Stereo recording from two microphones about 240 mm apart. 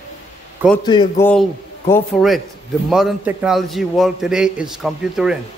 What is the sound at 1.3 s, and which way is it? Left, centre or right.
A man's voice, centre.